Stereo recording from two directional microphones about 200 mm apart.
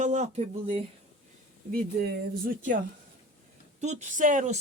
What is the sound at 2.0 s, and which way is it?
Speech, 50° right (ahead or behind).